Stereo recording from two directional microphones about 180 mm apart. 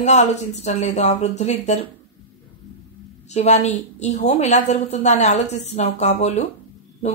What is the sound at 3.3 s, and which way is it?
A woman's voice, 40° left (ahead or behind).